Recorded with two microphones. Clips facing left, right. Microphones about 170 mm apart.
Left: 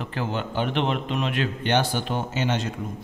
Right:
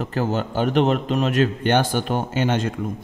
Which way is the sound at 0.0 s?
40° right (ahead or behind).